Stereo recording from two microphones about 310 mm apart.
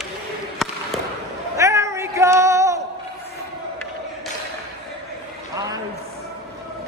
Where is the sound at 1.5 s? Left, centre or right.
Centre.